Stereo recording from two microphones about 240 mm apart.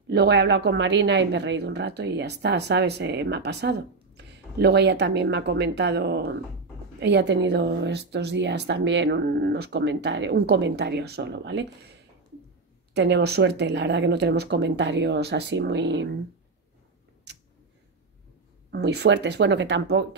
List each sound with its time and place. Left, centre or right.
0.1 s a woman's voice: right
12.9 s a woman's voice: right
18.7 s a woman's voice: right